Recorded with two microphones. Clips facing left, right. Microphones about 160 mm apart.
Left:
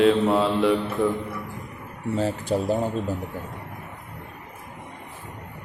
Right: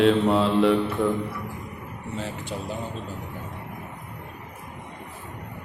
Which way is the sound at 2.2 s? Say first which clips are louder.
Left 9 dB; 40° left (ahead or behind).